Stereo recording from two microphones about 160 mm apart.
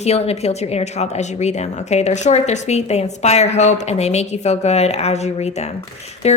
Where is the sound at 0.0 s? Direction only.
40° left (ahead or behind).